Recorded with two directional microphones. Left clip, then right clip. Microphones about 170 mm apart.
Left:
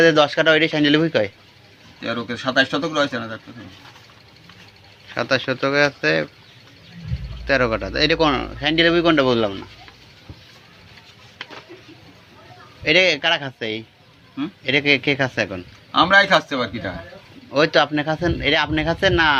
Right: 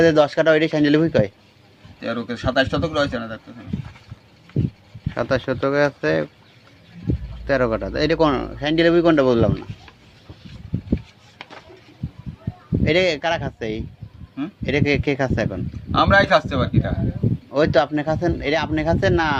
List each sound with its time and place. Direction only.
0.0 s speech: 30° right (ahead or behind)
2.0 s speech: 45° right (ahead or behind)
5.1 s speech: 30° right (ahead or behind)
7.4 s speech: 30° right (ahead or behind)
12.8 s speech: 30° right (ahead or behind)
15.9 s speech: 45° right (ahead or behind)
17.5 s speech: 30° right (ahead or behind)